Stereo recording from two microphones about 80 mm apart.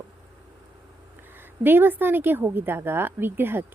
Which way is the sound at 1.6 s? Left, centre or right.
Right.